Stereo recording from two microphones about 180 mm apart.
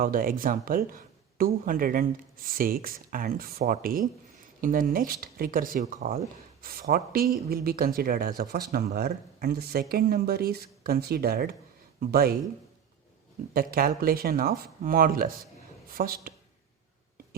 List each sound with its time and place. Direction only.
0.0 s speech: 50° right (ahead or behind)
13.5 s speech: 55° right (ahead or behind)